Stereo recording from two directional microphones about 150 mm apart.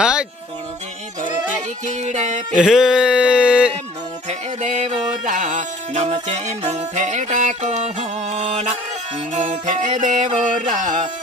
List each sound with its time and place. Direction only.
0.0 s music: 5° right (ahead or behind)
1.9 s music: 50° right (ahead or behind)
2.5 s music: 5° right (ahead or behind)
4.3 s music: 50° right (ahead or behind)